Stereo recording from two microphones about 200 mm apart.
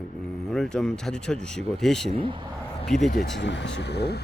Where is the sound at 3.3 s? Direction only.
60° left (ahead or behind).